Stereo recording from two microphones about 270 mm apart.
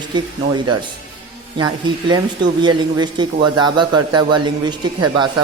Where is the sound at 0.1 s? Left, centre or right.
Centre.